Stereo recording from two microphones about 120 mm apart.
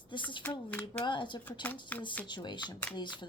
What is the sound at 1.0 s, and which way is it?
Speech, 40° left (ahead or behind).